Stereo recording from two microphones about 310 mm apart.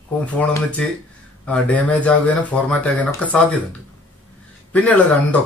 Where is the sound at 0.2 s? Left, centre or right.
Centre.